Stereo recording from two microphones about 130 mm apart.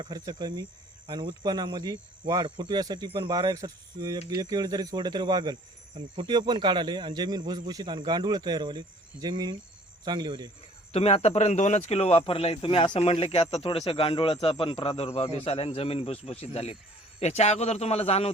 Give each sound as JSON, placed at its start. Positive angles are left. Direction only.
{"t": 0.0, "sound": "a man's voice", "side_deg": -30}
{"t": 10.9, "sound": "speech", "side_deg": 55}